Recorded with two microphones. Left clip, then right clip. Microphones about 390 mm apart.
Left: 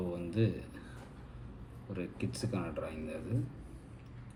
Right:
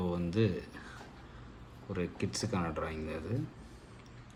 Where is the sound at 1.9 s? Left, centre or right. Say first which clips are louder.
Right 4 dB; centre.